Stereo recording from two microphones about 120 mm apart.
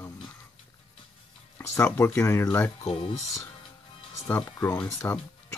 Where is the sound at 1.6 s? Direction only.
20° left (ahead or behind).